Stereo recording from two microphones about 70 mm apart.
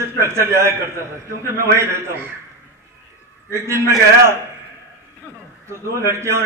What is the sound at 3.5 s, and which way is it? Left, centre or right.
Speech, right.